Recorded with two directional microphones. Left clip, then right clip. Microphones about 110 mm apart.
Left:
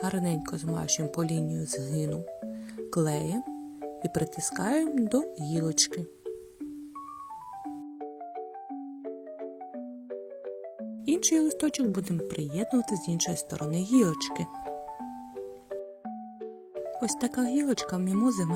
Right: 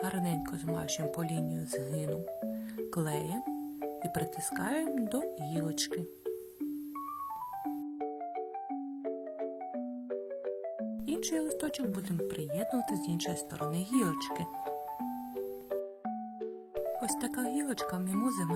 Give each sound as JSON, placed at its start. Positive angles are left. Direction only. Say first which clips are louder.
{"t": 0.0, "sound": "speech", "louder": "left 3 dB", "side_deg": 25}
{"t": 2.5, "sound": "music", "louder": "left 2 dB", "side_deg": 20}
{"t": 4.0, "sound": "speech", "louder": "left 7 dB", "side_deg": 20}
{"t": 9.0, "sound": "music", "louder": "right 2 dB", "side_deg": 0}
{"t": 11.0, "sound": "speech", "louder": "left 10 dB", "side_deg": 30}
{"t": 15.4, "sound": "music", "louder": "right 1 dB", "side_deg": 0}
{"t": 17.0, "sound": "speech", "louder": "left 5 dB", "side_deg": 25}